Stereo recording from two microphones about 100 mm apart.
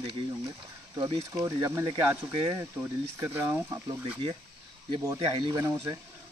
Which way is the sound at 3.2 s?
25° right (ahead or behind).